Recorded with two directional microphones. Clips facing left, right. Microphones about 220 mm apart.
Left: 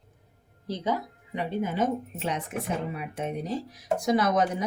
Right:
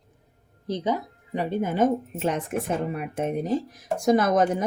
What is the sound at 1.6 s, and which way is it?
Speech, 50° right (ahead or behind).